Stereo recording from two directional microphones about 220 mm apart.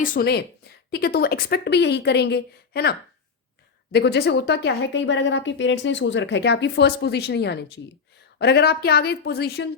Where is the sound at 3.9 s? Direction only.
50° left (ahead or behind).